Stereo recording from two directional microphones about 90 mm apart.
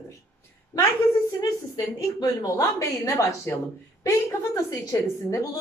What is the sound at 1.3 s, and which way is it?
A woman's voice, 45° left (ahead or behind).